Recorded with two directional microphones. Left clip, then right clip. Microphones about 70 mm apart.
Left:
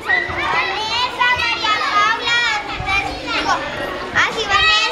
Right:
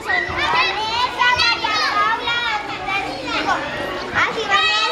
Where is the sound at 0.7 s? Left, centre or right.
Left.